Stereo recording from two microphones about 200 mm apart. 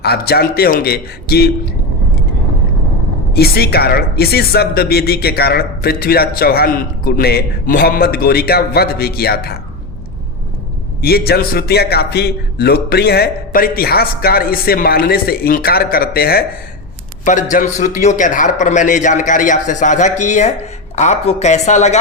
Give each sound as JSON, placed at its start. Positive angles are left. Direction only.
{"t": 0.0, "sound": "speech", "side_deg": 50}
{"t": 3.3, "sound": "speech", "side_deg": 50}
{"t": 11.0, "sound": "a man's voice", "side_deg": 50}